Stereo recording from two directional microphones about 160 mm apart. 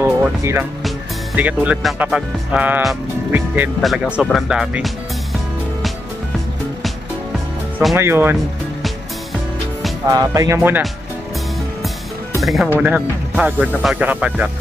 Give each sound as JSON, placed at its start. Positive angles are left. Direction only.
{"t": 0.0, "sound": "speech", "side_deg": -15}
{"t": 3.8, "sound": "speech", "side_deg": 0}
{"t": 7.9, "sound": "speech", "side_deg": -15}
{"t": 10.0, "sound": "speech", "side_deg": -20}
{"t": 12.4, "sound": "speech", "side_deg": 0}